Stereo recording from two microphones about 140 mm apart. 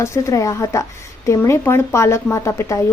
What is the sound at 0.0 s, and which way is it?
A woman's voice, 20° left (ahead or behind).